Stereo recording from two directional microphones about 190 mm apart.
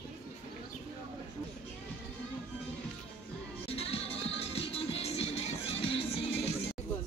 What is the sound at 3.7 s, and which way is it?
Music, 30° left (ahead or behind).